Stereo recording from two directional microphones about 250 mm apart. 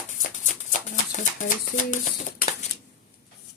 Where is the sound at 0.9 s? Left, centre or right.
Left.